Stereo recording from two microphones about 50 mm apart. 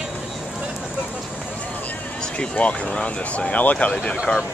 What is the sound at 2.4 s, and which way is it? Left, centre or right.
Speech, left.